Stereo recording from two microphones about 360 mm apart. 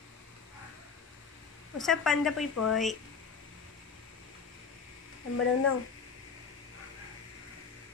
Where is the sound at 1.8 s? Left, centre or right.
Centre.